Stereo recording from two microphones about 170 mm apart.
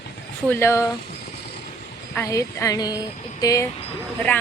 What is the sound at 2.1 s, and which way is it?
Speech, 15° left (ahead or behind).